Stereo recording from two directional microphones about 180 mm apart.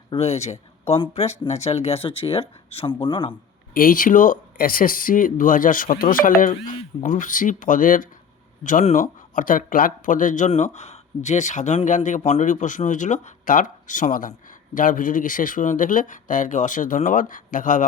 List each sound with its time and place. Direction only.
0.1 s speech: 35° left (ahead or behind)
3.8 s speech: 50° left (ahead or behind)